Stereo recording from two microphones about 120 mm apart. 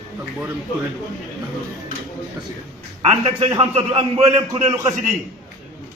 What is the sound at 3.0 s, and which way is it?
A man's voice, 55° right (ahead or behind).